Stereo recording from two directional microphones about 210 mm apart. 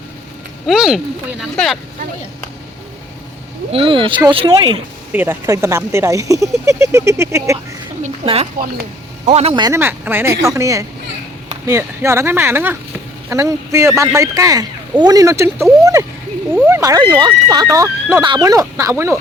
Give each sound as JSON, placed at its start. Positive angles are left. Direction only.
{"t": 0.7, "sound": "speech", "side_deg": 0}
{"t": 3.7, "sound": "speech", "side_deg": -25}
{"t": 5.1, "sound": "speech", "side_deg": -10}
{"t": 8.0, "sound": "a woman's voice", "side_deg": -30}